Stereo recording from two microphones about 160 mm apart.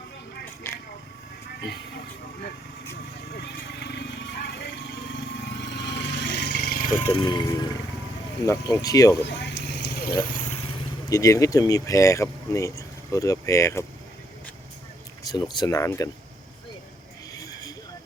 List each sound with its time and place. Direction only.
0.7 s vehicle: 15° left (ahead or behind)
3.3 s a sound: 90° left; by 6.9 s 70° left (ahead or behind)
6.9 s speech: 15° left (ahead or behind)
7.2 s speech: 25° left (ahead or behind)
9.2 s vehicle: 90° left
11.1 s speech: 20° left (ahead or behind)
15.2 s speech: 25° left (ahead or behind)